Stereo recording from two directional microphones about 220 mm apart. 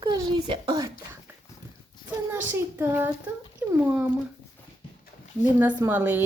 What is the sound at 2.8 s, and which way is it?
A woman's voice, 10° right (ahead or behind).